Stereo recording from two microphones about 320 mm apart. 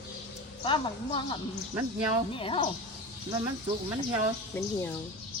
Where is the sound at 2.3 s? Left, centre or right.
Centre.